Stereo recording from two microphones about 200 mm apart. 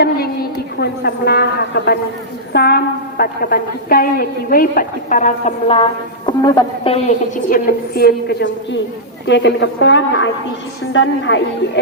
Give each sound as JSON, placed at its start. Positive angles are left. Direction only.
{"t": 0.8, "sound": "a woman's voice", "side_deg": 55}
{"t": 6.2, "sound": "speech", "side_deg": 20}
{"t": 7.5, "sound": "a woman's voice", "side_deg": 50}